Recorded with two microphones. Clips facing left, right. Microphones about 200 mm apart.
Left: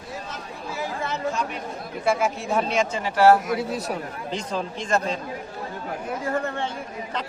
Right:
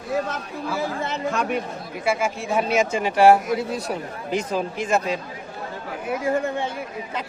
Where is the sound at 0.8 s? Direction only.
20° right (ahead or behind).